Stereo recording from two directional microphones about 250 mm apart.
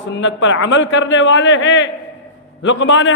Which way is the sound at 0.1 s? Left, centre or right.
Left.